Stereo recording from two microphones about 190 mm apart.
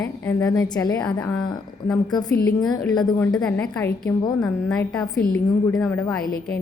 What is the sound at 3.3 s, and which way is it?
A woman's voice, 5° left (ahead or behind).